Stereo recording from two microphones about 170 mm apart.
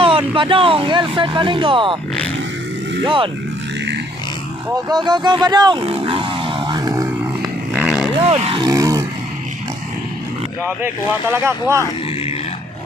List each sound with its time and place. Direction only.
0.0 s speech: 30° right (ahead or behind)
3.0 s speech: 30° right (ahead or behind)
4.7 s speech: 25° right (ahead or behind)
7.4 s a sound: 5° right (ahead or behind)
8.2 s speech: 35° right (ahead or behind)
8.6 s a sound: 20° right (ahead or behind)
10.8 s speech: 15° right (ahead or behind)